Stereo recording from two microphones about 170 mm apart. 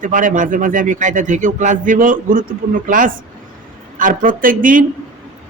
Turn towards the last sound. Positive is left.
turn(degrees=-55)  # may be behind; listen again after turning